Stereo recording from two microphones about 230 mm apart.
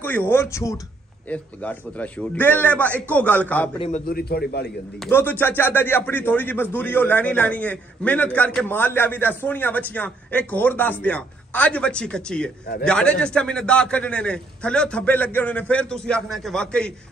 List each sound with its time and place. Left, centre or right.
0.0 s speech: centre
4.1 s a man's voice: left
5.0 s a man's voice: centre